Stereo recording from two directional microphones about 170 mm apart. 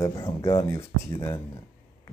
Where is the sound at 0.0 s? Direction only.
20° left (ahead or behind).